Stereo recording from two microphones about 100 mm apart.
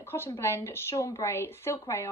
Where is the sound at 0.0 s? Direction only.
25° left (ahead or behind).